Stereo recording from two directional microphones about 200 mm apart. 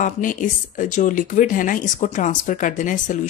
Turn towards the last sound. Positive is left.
turn(degrees=40)  # may be behind; listen again after turning